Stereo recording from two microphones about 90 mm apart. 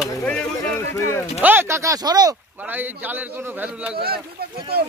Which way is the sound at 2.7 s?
20° right (ahead or behind).